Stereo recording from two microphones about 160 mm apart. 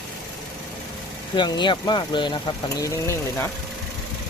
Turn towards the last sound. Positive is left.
turn(degrees=20)  # may be behind; listen again after turning